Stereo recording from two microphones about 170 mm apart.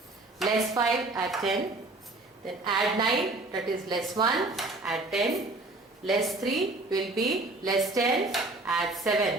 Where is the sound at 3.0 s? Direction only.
25° right (ahead or behind).